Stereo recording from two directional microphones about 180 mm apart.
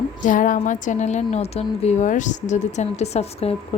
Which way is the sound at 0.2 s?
45° left (ahead or behind).